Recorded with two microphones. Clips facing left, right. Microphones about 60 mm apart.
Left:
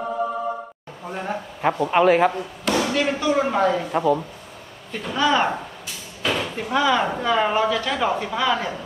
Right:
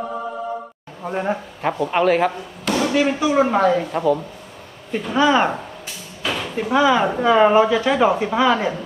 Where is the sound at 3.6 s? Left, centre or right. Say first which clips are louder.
Right 2 dB; centre.